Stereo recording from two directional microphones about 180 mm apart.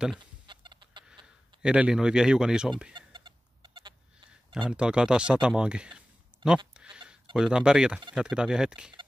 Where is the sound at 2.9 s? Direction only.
25° right (ahead or behind).